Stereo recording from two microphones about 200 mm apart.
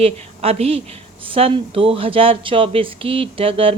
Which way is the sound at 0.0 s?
30° right (ahead or behind).